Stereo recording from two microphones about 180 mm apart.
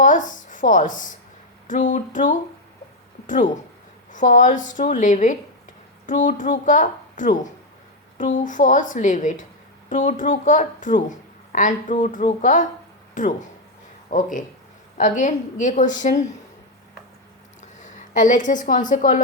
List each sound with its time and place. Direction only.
0.0 s a woman's voice: 45° left (ahead or behind)
17.6 s a woman's voice: 45° left (ahead or behind)